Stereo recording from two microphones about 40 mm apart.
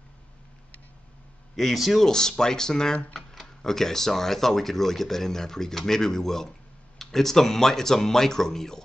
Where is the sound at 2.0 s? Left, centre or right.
Centre.